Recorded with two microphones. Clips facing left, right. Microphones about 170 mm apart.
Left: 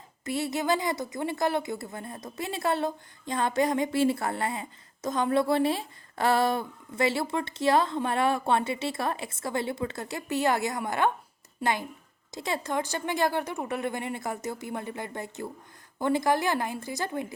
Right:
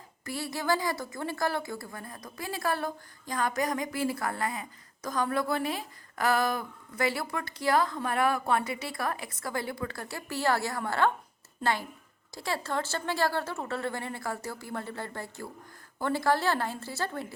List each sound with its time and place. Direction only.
0.3 s a woman's voice: 20° left (ahead or behind)